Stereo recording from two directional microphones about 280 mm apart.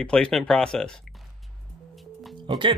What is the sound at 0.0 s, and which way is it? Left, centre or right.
Speech, centre.